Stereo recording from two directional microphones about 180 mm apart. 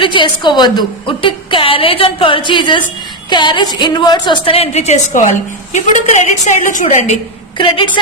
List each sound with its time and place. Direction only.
0.0 s a woman's voice: 25° left (ahead or behind); by 7.2 s 45° left (ahead or behind)